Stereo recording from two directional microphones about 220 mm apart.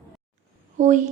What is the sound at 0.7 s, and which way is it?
Speech, 35° right (ahead or behind).